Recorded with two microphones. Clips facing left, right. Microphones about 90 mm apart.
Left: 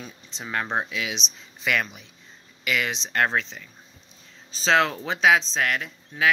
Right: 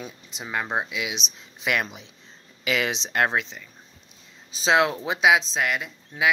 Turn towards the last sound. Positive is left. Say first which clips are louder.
# even
turn(degrees=-10)  # may be behind; listen again after turning